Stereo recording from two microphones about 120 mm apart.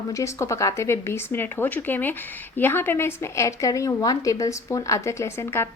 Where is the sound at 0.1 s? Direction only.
25° left (ahead or behind).